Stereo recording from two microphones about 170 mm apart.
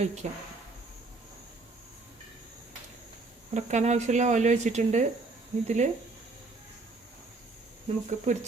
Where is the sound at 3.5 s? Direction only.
45° right (ahead or behind).